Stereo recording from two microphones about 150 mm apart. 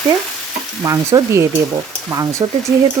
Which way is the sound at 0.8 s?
20° right (ahead or behind).